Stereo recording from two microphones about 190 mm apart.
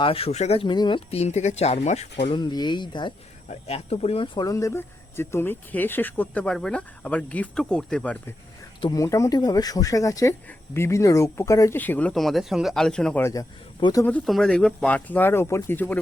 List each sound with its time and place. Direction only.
0.0 s speech: 30° left (ahead or behind)
2.2 s speech: 25° left (ahead or behind); by 8.2 s 5° left (ahead or behind)
8.8 s speech: 20° left (ahead or behind)
13.7 s speech: 25° left (ahead or behind)
14.0 s speech: 5° left (ahead or behind)